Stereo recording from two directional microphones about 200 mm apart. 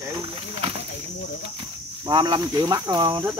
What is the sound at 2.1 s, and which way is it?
Speech, 20° right (ahead or behind).